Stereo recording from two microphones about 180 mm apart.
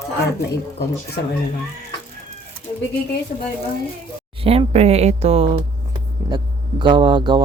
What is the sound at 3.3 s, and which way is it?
Speech, 45° left (ahead or behind).